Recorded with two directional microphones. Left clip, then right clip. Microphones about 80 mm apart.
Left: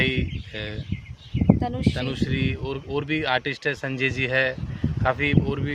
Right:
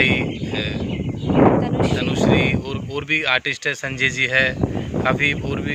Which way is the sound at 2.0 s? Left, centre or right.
Left.